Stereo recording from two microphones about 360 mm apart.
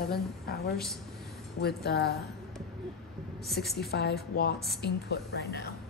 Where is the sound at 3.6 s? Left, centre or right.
Left.